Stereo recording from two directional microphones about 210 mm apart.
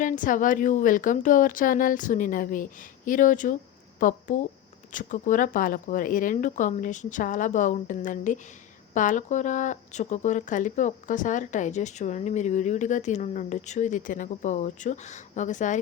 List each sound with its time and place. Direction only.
0.0 s speech: 40° left (ahead or behind)